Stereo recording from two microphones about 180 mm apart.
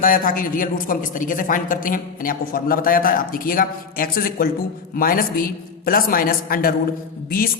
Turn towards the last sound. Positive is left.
turn(degrees=55)  # may be behind; listen again after turning